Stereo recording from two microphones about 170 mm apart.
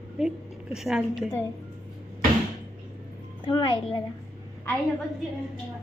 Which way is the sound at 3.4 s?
25° left (ahead or behind).